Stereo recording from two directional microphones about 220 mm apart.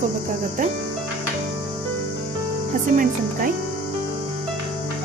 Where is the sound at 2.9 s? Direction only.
40° right (ahead or behind).